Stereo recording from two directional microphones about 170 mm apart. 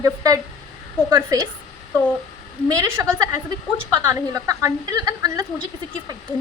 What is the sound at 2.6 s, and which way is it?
A woman's voice, 20° right (ahead or behind).